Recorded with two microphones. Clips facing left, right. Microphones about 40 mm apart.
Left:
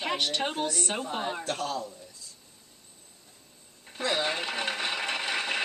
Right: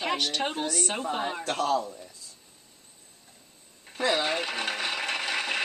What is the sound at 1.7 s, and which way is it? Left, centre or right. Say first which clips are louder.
Speech: right 7 dB; right.